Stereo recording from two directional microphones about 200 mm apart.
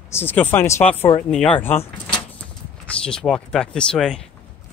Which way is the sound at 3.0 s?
5° left (ahead or behind).